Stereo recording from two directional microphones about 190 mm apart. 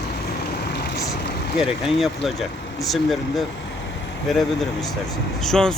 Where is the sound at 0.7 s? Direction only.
60° left (ahead or behind).